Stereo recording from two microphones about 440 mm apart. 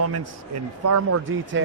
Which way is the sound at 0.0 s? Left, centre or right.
Right.